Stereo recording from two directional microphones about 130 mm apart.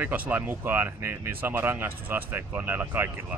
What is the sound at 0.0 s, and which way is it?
A man's voice, 15° right (ahead or behind).